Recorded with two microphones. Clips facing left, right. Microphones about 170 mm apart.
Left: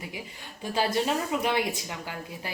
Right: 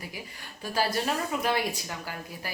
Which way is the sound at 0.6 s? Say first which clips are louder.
Left 2 dB; 20° left (ahead or behind).